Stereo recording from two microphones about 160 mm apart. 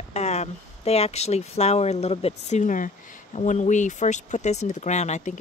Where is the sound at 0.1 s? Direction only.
45° left (ahead or behind).